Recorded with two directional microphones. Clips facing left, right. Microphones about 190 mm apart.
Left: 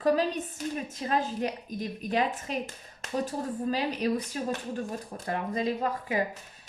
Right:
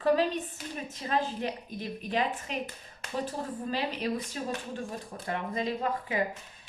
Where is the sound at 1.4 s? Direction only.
40° left (ahead or behind).